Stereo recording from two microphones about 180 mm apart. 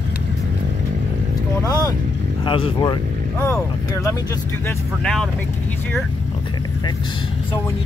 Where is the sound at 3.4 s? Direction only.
15° left (ahead or behind).